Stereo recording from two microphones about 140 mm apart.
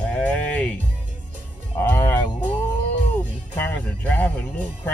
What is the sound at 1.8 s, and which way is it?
Speech, 15° left (ahead or behind).